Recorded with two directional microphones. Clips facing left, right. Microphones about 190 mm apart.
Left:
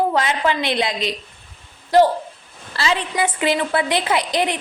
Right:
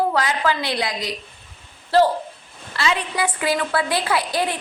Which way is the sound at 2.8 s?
30° left (ahead or behind).